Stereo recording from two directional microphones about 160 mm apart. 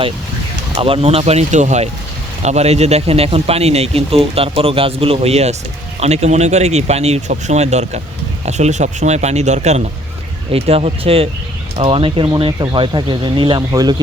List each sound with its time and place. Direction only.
0.8 s speech: 35° right (ahead or behind)